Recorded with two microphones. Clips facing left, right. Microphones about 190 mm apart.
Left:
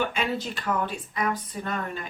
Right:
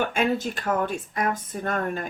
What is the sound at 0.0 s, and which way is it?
Speech, 50° right (ahead or behind).